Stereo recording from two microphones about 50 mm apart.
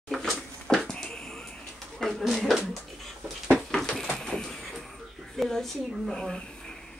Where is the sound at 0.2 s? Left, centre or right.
Centre.